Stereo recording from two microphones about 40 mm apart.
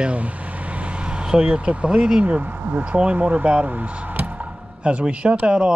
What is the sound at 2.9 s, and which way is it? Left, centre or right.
Speech, right.